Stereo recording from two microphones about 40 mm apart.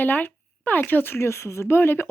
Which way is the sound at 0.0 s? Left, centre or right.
Left.